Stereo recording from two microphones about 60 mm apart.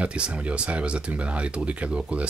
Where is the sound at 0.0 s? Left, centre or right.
Centre.